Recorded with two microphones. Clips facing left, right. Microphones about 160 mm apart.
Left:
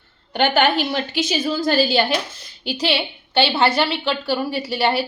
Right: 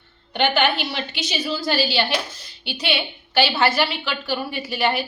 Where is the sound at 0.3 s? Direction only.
40° left (ahead or behind).